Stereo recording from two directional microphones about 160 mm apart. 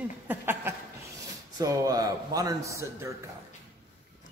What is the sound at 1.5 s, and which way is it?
A man's voice, 20° right (ahead or behind).